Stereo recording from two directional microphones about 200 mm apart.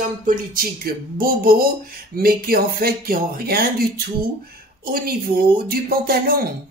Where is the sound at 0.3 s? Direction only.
45° right (ahead or behind).